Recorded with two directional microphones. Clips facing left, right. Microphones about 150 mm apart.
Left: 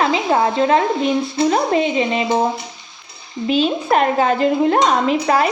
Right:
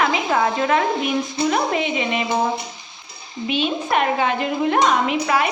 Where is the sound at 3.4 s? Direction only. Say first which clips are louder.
Left 5 dB; 35° left (ahead or behind).